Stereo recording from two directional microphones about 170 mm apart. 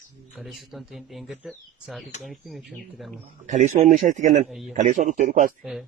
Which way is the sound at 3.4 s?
45° right (ahead or behind).